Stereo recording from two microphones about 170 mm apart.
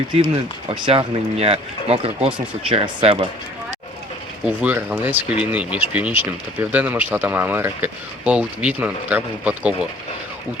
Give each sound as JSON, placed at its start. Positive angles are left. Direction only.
{"t": 0.2, "sound": "speech", "side_deg": -30}
{"t": 4.4, "sound": "speech", "side_deg": -10}